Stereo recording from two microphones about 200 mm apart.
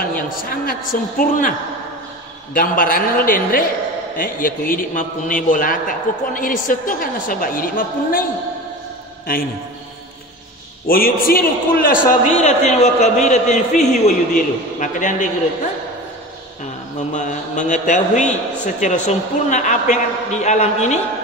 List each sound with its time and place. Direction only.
0.0 s a man's voice: 45° left (ahead or behind)
2.5 s a man's voice: 45° left (ahead or behind)
9.3 s a man's voice: 45° left (ahead or behind)
10.9 s a man's voice: 45° left (ahead or behind)
12.4 s a man's voice: 35° left (ahead or behind)
17.1 s a man's voice: 40° left (ahead or behind)